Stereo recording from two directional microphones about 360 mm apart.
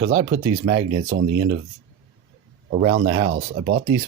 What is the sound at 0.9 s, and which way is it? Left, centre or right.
Speech, right.